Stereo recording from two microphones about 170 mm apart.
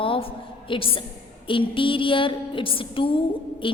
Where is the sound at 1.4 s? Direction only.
30° left (ahead or behind).